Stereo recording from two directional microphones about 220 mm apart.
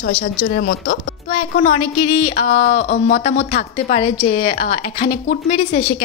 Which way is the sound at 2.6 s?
45° left (ahead or behind).